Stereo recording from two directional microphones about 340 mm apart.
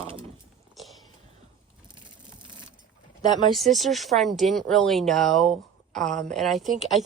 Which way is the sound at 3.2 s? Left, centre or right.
Centre.